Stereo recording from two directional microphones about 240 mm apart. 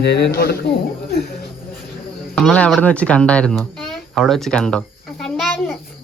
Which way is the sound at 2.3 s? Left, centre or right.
Centre.